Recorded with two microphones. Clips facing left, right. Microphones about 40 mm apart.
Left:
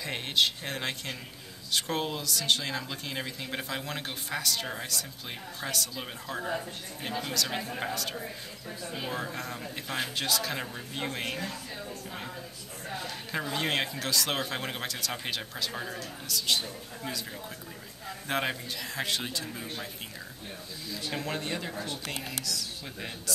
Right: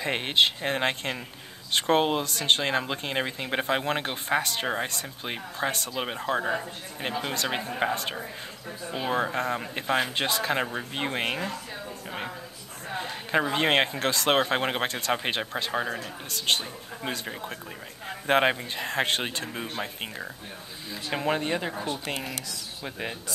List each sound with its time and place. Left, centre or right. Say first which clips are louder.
0.0 s speech: right 5 dB; right
12.9 s speech: right 8 dB; right
20.9 s speech: right 6 dB; right